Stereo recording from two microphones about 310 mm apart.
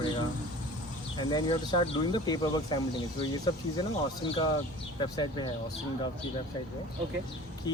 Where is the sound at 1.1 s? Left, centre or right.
Centre.